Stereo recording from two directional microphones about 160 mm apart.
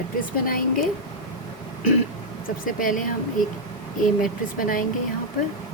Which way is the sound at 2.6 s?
60° left (ahead or behind).